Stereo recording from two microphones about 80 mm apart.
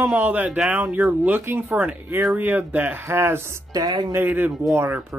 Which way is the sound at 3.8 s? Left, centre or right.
Right.